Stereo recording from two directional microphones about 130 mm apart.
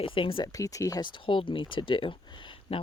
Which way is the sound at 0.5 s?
25° left (ahead or behind).